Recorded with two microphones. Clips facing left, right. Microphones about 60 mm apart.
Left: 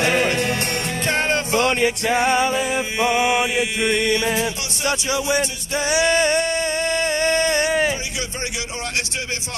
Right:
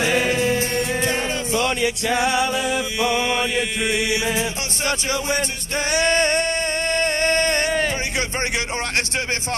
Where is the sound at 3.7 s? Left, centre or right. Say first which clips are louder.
Left 2 dB; centre.